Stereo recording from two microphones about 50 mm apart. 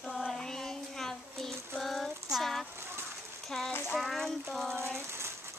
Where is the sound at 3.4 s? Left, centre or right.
Centre.